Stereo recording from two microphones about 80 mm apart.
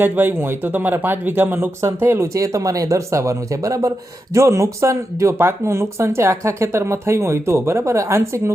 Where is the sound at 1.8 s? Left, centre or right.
Right.